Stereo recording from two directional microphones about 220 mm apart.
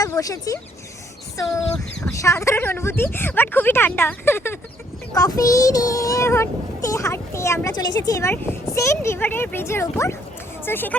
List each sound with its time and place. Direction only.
0.0 s speech: 15° left (ahead or behind)
2.2 s child singing: 15° left (ahead or behind)